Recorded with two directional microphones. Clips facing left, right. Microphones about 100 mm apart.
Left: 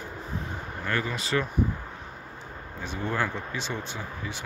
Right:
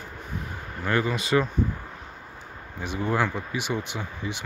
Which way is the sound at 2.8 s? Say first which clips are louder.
Right 4 dB; 15° right (ahead or behind).